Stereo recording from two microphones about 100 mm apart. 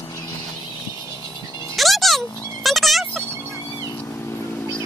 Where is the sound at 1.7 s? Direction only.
Centre (ahead or behind).